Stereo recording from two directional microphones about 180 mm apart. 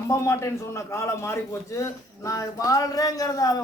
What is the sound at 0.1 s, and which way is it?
A man's voice, 15° left (ahead or behind).